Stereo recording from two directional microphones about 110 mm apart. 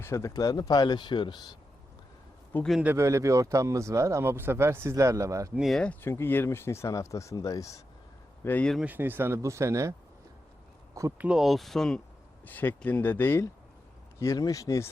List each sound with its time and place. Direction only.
0.0 s speech: 25° left (ahead or behind); by 1.5 s 40° left (ahead or behind)
2.8 s speech: 25° right (ahead or behind)
5.5 s speech: centre (ahead or behind)
5.8 s speech: 10° left (ahead or behind); by 7.8 s 30° left (ahead or behind)
8.4 s speech: 15° left (ahead or behind)
8.8 s speech: 15° right (ahead or behind)
11.2 s speech: 5° right (ahead or behind)
12.5 s speech: 15° left (ahead or behind)
14.2 s speech: 30° left (ahead or behind)